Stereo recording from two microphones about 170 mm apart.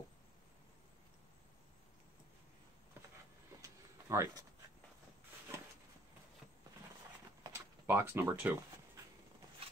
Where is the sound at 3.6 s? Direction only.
20° right (ahead or behind).